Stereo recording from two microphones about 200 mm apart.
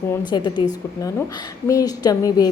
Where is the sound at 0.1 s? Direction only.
20° left (ahead or behind).